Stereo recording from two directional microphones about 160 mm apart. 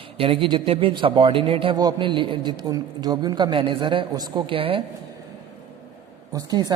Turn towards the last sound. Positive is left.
turn(degrees=-25)  # may be behind; listen again after turning